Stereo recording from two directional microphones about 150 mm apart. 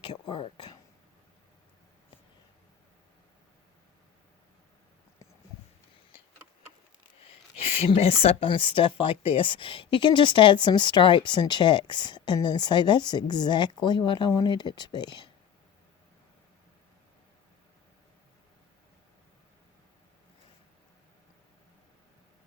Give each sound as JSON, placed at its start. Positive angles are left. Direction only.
{"t": 0.0, "sound": "speech", "side_deg": 35}
{"t": 7.6, "sound": "speech", "side_deg": 40}